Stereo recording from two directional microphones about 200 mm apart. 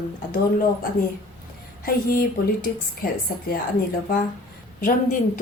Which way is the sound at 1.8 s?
45° left (ahead or behind).